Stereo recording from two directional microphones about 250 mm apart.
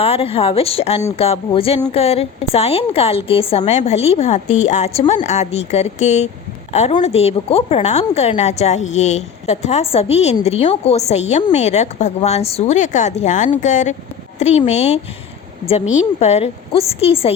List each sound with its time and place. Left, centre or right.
0.0 s a woman's voice: left